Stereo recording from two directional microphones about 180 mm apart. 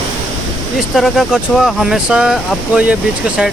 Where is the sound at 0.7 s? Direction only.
Centre (ahead or behind).